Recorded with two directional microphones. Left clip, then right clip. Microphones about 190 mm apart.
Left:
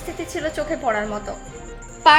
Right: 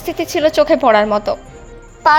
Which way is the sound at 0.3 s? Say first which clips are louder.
Right 13 dB; 40° right (ahead or behind).